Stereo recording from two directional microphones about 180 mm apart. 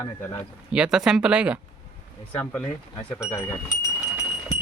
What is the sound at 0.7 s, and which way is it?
Speech, 5° right (ahead or behind).